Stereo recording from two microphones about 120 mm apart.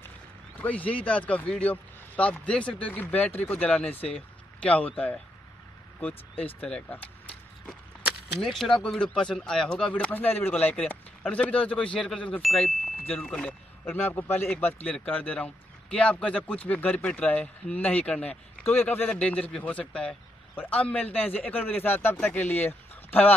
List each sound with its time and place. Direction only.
0.6 s a man's voice: 15° left (ahead or behind)
8.4 s a man's voice: centre (ahead or behind)
14.1 s a man's voice: 20° left (ahead or behind)